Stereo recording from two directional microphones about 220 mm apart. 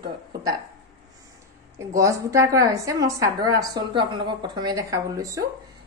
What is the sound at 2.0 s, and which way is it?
A woman's voice, 15° right (ahead or behind).